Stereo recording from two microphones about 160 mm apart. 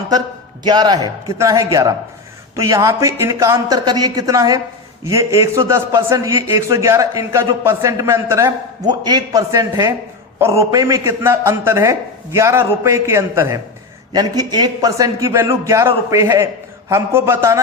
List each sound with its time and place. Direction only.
0.6 s a man's voice: 25° right (ahead or behind)